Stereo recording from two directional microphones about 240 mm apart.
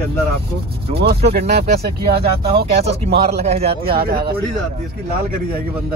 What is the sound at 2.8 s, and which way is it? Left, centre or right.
Speech, right.